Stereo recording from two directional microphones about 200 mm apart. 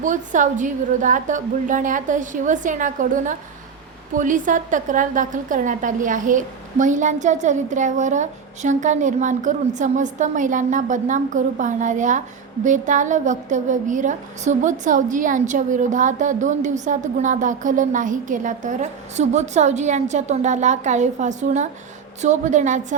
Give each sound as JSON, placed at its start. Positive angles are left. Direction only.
{"t": 0.0, "sound": "a woman's voice", "side_deg": -40}